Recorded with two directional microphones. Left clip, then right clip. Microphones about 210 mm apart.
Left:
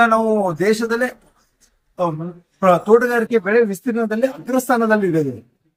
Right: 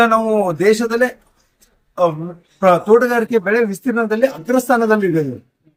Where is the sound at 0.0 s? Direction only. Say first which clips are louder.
Right 1 dB; 15° right (ahead or behind).